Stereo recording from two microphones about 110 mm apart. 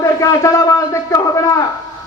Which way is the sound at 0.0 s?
30° left (ahead or behind).